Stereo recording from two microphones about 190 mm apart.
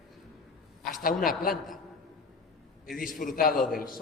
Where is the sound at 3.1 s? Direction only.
45° left (ahead or behind).